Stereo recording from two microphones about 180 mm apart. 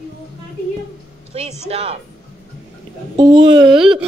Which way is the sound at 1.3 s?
35° right (ahead or behind).